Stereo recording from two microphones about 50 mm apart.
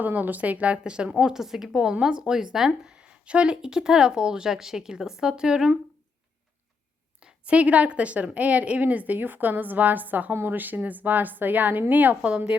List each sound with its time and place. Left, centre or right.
0.0 s a woman's voice: right
1.2 s speech: centre
2.9 s speech: right
7.2 s a woman's voice: right